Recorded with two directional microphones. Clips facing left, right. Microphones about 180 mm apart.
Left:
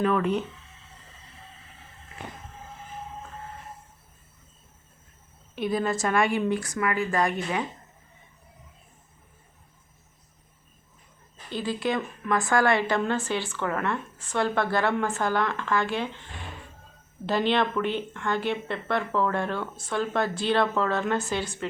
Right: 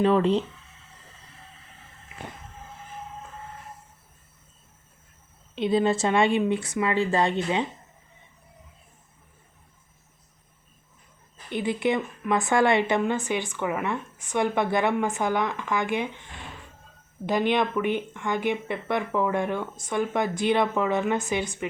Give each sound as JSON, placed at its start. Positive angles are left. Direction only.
{"t": 0.0, "sound": "speech", "side_deg": -30}
{"t": 5.5, "sound": "speech", "side_deg": -25}
{"t": 11.4, "sound": "speech", "side_deg": -20}